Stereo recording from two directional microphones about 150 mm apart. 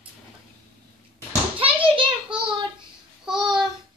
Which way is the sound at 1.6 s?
35° right (ahead or behind).